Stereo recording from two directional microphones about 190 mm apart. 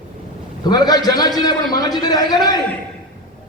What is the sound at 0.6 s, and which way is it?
Speech, 20° left (ahead or behind).